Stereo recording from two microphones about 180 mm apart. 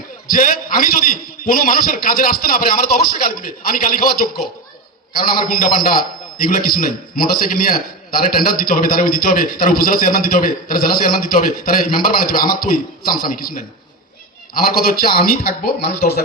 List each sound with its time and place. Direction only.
0.3 s a man's voice: 50° left (ahead or behind)